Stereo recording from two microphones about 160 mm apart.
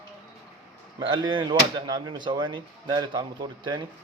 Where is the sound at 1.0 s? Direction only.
30° right (ahead or behind).